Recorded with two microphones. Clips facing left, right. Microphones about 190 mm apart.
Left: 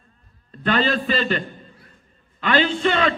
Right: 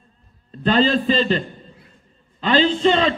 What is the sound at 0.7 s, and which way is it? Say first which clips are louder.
Speech: right 4 dB; 30° right (ahead or behind).